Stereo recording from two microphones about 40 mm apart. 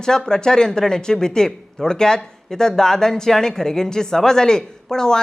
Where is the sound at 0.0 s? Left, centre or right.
Centre.